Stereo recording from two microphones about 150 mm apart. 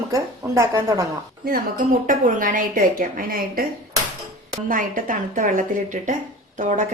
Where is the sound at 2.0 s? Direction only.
65° right (ahead or behind).